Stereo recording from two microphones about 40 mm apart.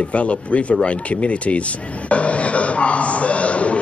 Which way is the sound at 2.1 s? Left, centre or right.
Left.